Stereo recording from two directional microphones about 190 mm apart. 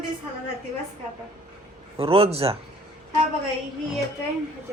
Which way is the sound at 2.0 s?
30° right (ahead or behind).